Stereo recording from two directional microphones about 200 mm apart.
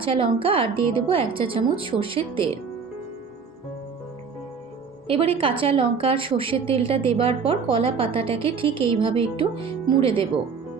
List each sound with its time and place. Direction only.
0.0 s a woman's voice: 25° right (ahead or behind)
5.0 s a woman's voice: 30° right (ahead or behind)